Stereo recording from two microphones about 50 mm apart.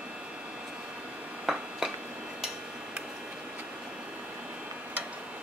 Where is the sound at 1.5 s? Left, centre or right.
Centre.